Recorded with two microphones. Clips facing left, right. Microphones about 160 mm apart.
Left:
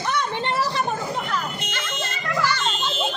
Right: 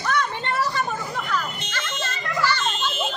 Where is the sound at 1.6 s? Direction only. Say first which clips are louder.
Left 1 dB; 15° left (ahead or behind).